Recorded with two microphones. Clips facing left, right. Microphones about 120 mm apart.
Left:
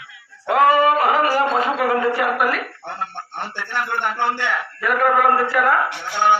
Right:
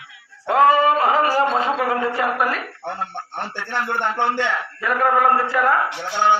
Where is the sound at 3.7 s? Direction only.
20° right (ahead or behind).